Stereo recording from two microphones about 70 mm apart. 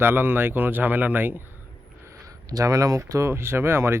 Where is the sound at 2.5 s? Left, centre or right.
Right.